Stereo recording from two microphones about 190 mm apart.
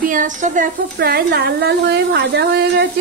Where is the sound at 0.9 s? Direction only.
55° right (ahead or behind).